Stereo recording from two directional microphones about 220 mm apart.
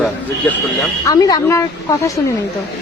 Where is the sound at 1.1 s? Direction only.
15° left (ahead or behind).